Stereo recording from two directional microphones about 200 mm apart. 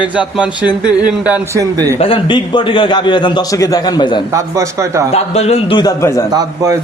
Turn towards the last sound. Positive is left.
turn(degrees=-15)  # may be behind; listen again after turning